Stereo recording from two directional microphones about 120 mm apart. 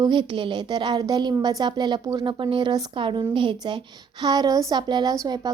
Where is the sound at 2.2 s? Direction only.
45° right (ahead or behind).